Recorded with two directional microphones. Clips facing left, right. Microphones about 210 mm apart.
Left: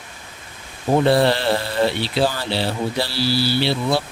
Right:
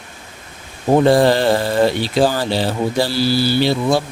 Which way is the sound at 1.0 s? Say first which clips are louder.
Right 4 dB; 45° right (ahead or behind).